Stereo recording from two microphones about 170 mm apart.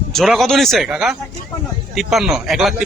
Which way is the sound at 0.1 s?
Centre (ahead or behind).